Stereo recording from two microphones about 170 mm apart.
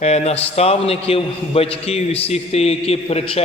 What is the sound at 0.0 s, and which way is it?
A man's voice, 40° left (ahead or behind).